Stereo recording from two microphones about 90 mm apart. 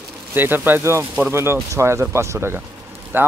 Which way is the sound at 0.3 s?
20° right (ahead or behind).